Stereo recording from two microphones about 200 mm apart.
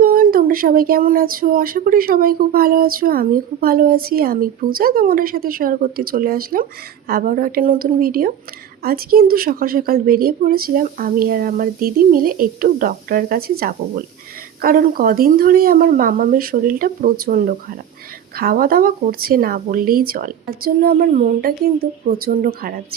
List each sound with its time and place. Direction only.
0.0 s speech: 45° right (ahead or behind)